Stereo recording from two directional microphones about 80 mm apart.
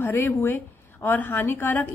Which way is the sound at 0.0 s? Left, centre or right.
Left.